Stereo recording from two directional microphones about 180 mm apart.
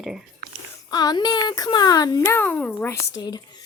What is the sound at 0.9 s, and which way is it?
Speech, 20° left (ahead or behind).